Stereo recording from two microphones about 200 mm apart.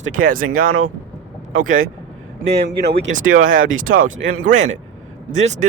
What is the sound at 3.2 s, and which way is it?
Speech, 90° right.